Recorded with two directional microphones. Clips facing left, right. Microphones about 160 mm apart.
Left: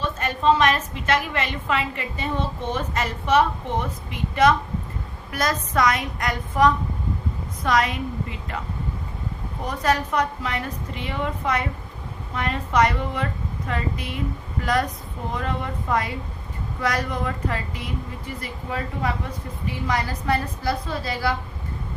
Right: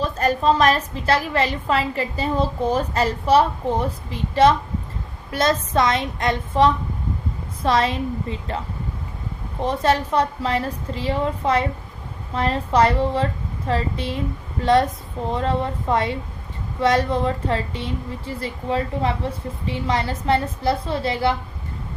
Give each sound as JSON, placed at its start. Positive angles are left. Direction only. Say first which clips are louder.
{"t": 0.0, "sound": "a woman's voice", "louder": "right 3 dB", "side_deg": -35}